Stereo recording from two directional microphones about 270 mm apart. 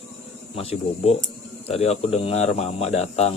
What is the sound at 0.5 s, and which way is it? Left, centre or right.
Speech, left.